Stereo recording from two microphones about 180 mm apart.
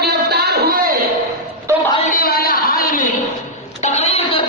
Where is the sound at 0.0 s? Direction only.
60° right (ahead or behind).